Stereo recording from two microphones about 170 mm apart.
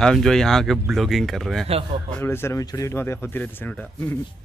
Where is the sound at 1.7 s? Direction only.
35° right (ahead or behind).